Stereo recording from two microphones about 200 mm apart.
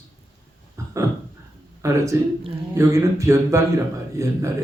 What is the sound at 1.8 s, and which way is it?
Speech, 15° right (ahead or behind).